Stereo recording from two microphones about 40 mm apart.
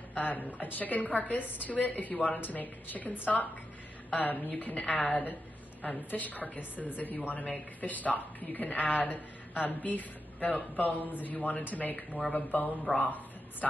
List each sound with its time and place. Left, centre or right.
0.1 s a woman's voice: left